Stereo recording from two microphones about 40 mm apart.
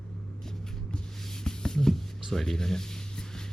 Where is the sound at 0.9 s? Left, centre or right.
Centre.